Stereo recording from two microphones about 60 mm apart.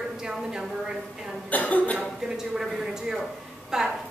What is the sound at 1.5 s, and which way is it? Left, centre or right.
Cough, left.